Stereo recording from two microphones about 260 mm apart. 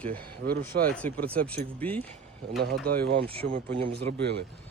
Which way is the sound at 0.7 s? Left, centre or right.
Right.